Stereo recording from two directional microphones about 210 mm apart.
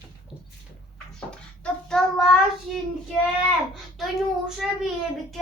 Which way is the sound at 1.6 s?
5° left (ahead or behind).